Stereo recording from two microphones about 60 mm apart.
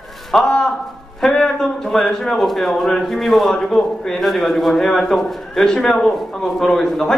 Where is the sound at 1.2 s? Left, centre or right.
Centre.